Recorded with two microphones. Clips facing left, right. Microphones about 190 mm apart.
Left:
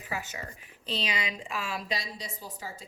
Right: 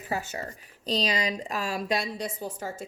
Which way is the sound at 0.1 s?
40° right (ahead or behind).